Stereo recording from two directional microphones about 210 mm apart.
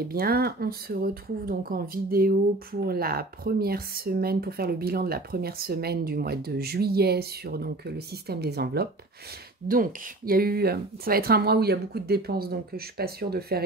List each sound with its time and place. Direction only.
0.1 s speech: 45° right (ahead or behind)